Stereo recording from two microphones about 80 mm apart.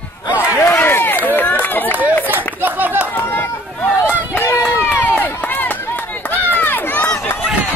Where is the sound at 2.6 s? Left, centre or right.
Right.